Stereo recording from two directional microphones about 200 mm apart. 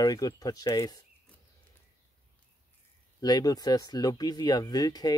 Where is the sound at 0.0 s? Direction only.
20° left (ahead or behind).